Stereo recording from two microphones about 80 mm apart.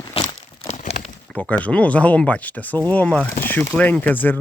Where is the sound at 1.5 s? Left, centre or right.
Centre.